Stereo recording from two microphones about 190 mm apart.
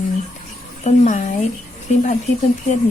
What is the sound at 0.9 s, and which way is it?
Speech, 40° left (ahead or behind).